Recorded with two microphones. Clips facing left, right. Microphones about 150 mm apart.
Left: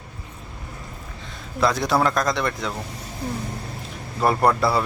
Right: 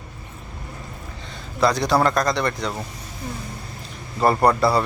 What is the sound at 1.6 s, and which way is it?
Speech, centre (ahead or behind).